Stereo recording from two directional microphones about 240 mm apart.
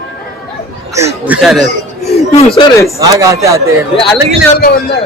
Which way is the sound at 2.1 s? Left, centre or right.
Left.